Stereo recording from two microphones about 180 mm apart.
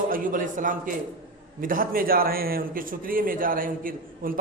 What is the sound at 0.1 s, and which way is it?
A man's voice, 45° right (ahead or behind).